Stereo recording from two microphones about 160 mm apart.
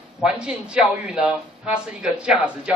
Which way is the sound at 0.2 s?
5° right (ahead or behind).